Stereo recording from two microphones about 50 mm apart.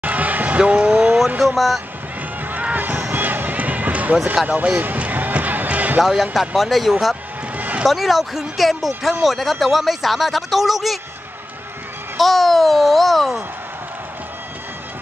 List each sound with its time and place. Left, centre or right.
0.0 s basketball bounce: right
0.6 s vehicle: right
1.4 s speech: centre
2.6 s a sound: right
3.1 s basketball bounce: right
4.5 s music: right
6.4 s speech: centre
7.5 s a sound: right
7.8 s speech: centre
12.2 s speech: centre